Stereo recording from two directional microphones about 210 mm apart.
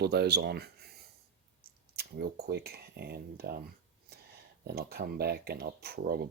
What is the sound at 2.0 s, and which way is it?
Speech, 50° right (ahead or behind).